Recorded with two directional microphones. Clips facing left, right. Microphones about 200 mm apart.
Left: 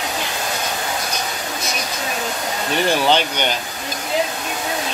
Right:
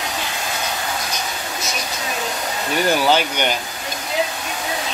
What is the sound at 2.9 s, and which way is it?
Speech, 5° right (ahead or behind).